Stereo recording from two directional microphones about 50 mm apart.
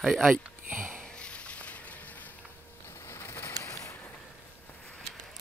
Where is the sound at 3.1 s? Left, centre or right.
Left.